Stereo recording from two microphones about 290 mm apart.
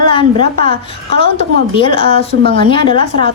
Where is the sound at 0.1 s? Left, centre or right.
Centre.